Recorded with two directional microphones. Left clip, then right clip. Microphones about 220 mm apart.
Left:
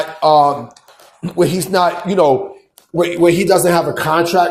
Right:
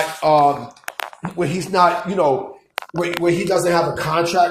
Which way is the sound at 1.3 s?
40° left (ahead or behind).